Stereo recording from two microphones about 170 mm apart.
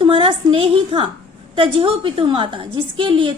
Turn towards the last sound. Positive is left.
turn(degrees=-30)  # may be behind; listen again after turning